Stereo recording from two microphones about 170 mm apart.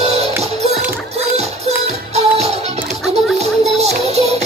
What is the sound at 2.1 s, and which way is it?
Music, 40° right (ahead or behind).